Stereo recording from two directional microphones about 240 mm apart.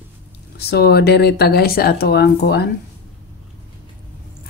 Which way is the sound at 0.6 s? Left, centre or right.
Left.